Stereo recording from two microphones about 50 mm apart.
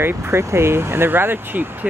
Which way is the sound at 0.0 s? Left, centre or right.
Right.